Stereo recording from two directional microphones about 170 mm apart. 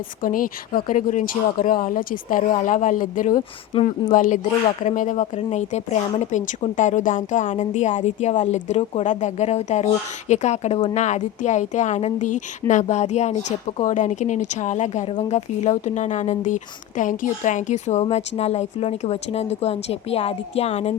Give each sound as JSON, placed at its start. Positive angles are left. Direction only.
{"t": 0.2, "sound": "a woman's voice", "side_deg": 55}